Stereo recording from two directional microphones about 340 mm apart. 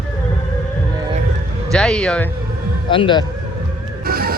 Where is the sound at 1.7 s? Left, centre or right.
Centre.